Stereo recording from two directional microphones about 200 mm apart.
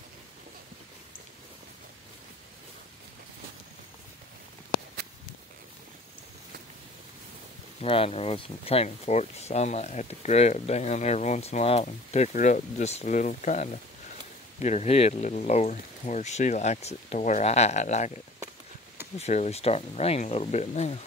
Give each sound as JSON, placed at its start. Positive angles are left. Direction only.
{"t": 7.8, "sound": "speech", "side_deg": 30}